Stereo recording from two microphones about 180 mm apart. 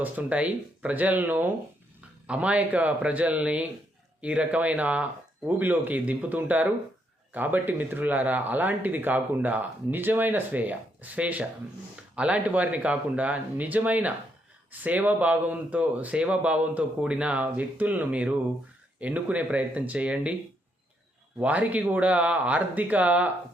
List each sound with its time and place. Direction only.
0.0 s speech: 10° right (ahead or behind)
21.3 s speech: 10° right (ahead or behind)